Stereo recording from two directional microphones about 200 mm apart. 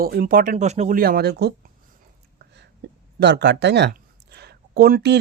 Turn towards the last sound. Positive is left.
turn(degrees=-55)  # may be behind; listen again after turning